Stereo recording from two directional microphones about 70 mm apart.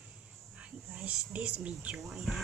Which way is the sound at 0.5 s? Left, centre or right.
Centre.